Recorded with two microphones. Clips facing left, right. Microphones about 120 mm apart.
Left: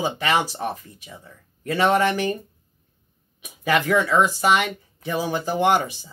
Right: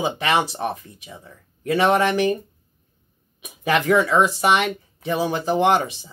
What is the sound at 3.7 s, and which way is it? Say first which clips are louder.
Speech: right 2 dB; 25° right (ahead or behind).